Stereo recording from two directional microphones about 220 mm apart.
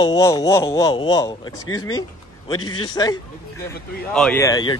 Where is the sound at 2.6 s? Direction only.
85° left.